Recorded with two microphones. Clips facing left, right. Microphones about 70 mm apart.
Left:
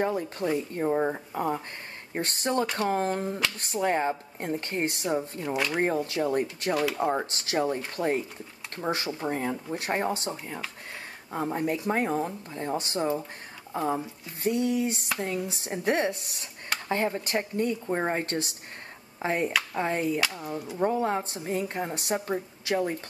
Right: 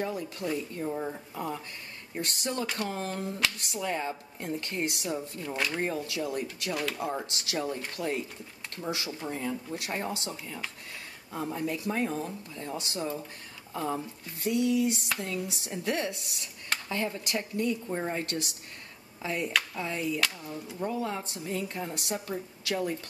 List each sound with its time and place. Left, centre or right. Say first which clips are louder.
0.0 s a woman's voice: left 5 dB; left
5.5 s speech: left 3 dB; centre
5.8 s a woman's voice: left 5 dB; left
11.3 s a woman's voice: left 4 dB; left
20.4 s speech: left 5 dB; left
20.8 s a woman's voice: left 6 dB; left